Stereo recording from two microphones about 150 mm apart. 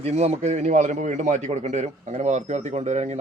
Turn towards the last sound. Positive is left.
turn(degrees=-50)  # may be behind; listen again after turning